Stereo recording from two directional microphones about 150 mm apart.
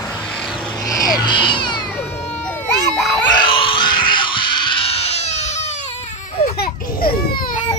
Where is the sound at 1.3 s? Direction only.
30° left (ahead or behind).